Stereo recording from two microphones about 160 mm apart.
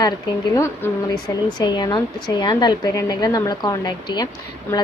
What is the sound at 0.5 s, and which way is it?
Speech, 20° left (ahead or behind).